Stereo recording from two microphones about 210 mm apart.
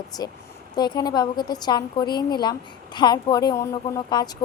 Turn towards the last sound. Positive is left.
turn(degrees=20)  # may be behind; listen again after turning